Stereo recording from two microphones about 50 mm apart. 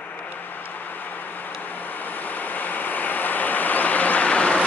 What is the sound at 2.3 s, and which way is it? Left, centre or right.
Vehicle, left.